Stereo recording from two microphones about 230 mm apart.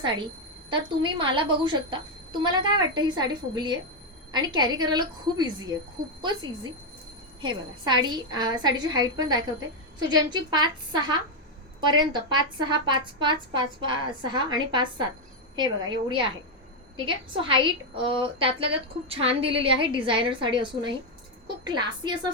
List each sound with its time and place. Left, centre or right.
0.7 s a woman's voice: right